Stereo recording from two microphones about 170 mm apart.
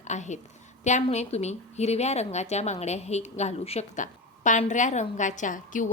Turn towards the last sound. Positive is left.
turn(degrees=50)  # may be behind; listen again after turning